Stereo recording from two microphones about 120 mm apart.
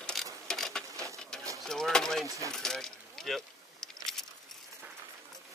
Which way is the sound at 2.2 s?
25° right (ahead or behind).